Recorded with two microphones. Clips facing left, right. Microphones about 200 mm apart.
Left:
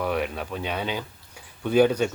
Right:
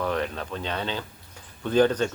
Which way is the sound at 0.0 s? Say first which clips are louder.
Left 1 dB; 10° left (ahead or behind).